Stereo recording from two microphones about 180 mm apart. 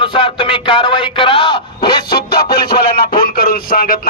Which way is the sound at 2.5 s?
60° left (ahead or behind).